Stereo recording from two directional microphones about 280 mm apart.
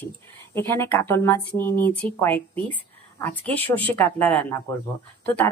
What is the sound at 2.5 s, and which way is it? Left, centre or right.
Speech, centre.